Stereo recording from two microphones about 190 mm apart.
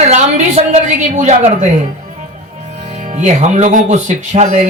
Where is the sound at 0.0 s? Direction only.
35° right (ahead or behind).